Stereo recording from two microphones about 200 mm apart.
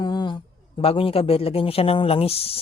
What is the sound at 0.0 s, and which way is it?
A man's voice, 20° left (ahead or behind).